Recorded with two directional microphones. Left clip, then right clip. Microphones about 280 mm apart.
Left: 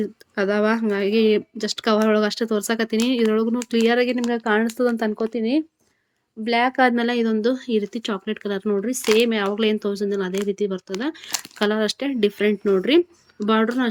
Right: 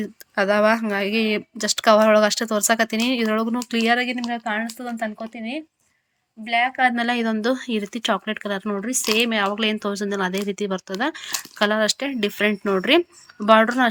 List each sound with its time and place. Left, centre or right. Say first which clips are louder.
0.0 s speech: right 1 dB; centre